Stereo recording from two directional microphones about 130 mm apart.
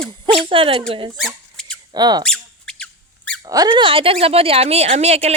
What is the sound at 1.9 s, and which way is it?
Speech, 30° right (ahead or behind).